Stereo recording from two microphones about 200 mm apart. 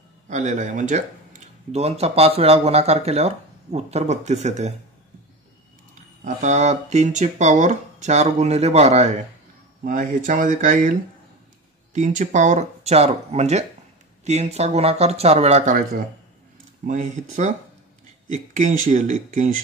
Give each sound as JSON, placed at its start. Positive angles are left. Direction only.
{"t": 0.3, "sound": "speech", "side_deg": -35}
{"t": 6.2, "sound": "speech", "side_deg": -35}
{"t": 11.9, "sound": "speech", "side_deg": -40}